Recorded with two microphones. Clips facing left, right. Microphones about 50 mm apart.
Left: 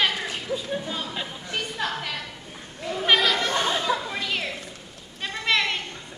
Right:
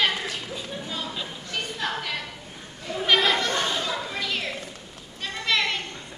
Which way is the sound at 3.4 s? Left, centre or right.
Left.